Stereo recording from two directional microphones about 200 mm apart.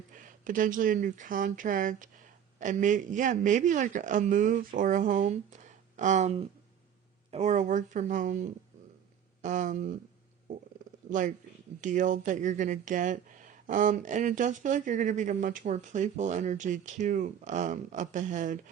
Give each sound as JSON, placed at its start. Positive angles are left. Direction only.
{"t": 0.1, "sound": "speech", "side_deg": -40}
{"t": 11.1, "sound": "speech", "side_deg": -40}